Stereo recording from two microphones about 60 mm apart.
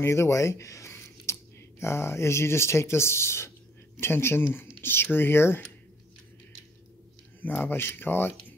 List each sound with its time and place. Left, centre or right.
0.0 s speech: left
7.4 s speech: left